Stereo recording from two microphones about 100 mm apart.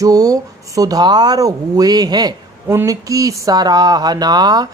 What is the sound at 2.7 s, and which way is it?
Speech, 30° right (ahead or behind).